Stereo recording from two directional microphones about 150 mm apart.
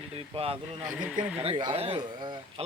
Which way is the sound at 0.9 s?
10° right (ahead or behind).